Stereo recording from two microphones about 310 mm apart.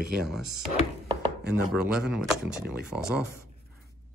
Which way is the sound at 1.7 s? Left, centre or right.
Centre.